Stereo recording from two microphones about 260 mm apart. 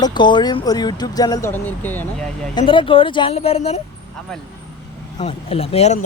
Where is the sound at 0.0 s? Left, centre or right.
Centre.